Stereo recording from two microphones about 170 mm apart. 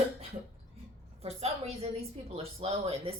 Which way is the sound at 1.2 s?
40° right (ahead or behind).